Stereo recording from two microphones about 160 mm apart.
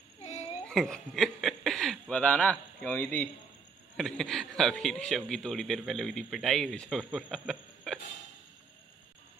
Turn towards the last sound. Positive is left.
turn(degrees=0)  # may be behind; listen again after turning